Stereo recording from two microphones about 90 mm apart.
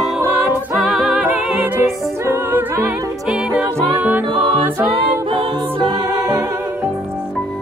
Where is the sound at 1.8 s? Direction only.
25° right (ahead or behind).